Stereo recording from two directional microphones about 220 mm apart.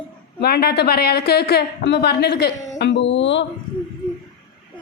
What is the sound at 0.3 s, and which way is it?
A woman's voice, 45° left (ahead or behind).